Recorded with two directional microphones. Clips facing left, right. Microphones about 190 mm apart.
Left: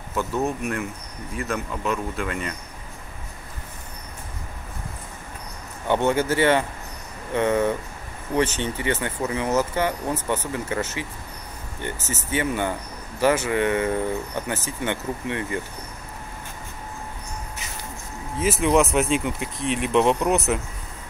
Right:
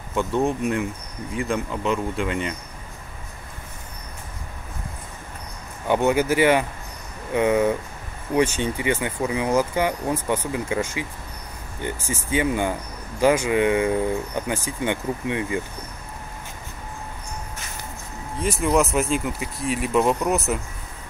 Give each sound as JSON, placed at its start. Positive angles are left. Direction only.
{"t": 0.5, "sound": "speech", "side_deg": -20}
{"t": 5.9, "sound": "speech", "side_deg": -10}
{"t": 18.4, "sound": "speech", "side_deg": 0}